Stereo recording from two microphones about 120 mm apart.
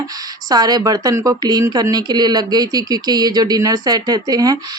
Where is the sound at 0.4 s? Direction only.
35° right (ahead or behind).